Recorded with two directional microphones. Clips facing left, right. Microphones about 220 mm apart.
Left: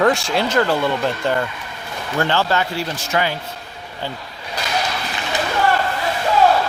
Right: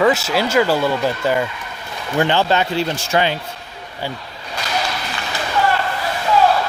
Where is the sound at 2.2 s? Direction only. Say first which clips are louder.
Right 3 dB; 15° right (ahead or behind).